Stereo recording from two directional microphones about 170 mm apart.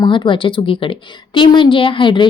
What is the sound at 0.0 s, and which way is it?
A woman's voice, 30° left (ahead or behind).